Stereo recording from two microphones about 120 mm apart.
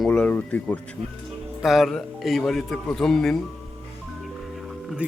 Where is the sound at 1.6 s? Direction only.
Centre (ahead or behind).